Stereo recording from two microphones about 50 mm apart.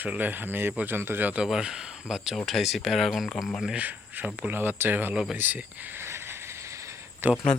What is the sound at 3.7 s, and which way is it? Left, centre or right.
Speech, right.